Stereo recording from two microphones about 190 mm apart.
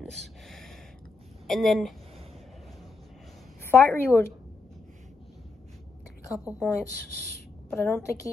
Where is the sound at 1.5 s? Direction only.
Centre (ahead or behind).